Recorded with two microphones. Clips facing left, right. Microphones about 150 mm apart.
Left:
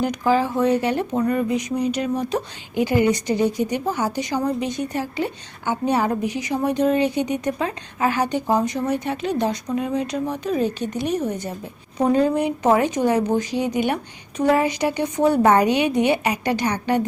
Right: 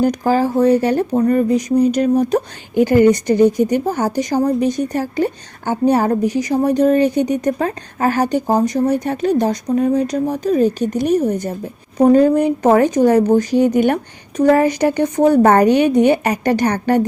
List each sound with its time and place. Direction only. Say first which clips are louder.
0.0 s a woman's voice: right 5 dB; 40° right (ahead or behind)